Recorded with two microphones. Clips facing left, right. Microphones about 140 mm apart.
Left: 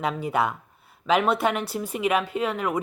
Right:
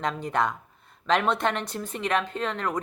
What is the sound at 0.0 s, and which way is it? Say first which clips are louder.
Speech: left 2 dB; 10° left (ahead or behind).